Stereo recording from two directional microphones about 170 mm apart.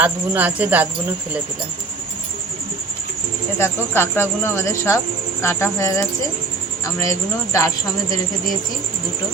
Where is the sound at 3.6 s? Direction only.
15° left (ahead or behind).